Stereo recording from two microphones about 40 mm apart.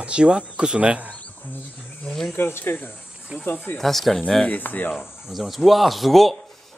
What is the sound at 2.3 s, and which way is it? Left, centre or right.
Speech, left.